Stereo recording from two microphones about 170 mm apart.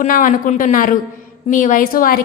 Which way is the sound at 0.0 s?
50° left (ahead or behind).